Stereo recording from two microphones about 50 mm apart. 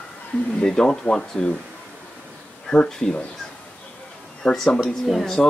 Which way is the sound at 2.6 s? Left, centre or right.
Centre.